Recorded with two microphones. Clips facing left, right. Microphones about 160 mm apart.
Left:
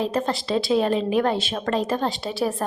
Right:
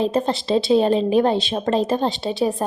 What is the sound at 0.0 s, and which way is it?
A woman's voice, 25° right (ahead or behind).